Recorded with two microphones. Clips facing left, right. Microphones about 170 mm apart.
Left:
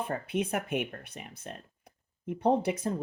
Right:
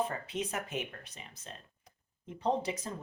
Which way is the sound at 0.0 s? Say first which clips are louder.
Left 3 dB; 60° left (ahead or behind).